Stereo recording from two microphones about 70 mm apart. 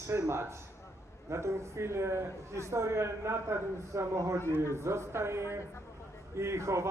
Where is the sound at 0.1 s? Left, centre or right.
Right.